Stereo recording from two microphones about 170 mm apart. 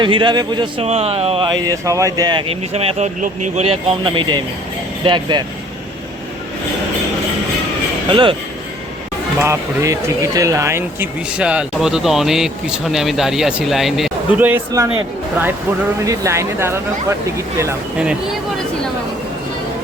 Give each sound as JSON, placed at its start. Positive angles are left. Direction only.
{"t": 0.0, "sound": "speech", "side_deg": -30}
{"t": 1.6, "sound": "speech", "side_deg": -20}
{"t": 8.1, "sound": "speech", "side_deg": -30}
{"t": 9.4, "sound": "speech", "side_deg": -15}
{"t": 14.4, "sound": "speech", "side_deg": -15}
{"t": 16.0, "sound": "speech", "side_deg": -15}
{"t": 17.9, "sound": "speech", "side_deg": -5}